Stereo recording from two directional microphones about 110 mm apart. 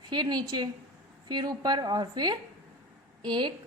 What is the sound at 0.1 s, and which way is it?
A woman's voice, 40° right (ahead or behind).